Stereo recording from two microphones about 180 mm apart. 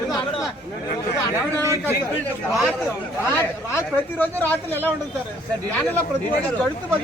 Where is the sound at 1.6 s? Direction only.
15° right (ahead or behind).